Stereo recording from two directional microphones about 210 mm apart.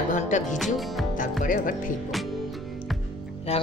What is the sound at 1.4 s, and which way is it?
Speech, 40° left (ahead or behind).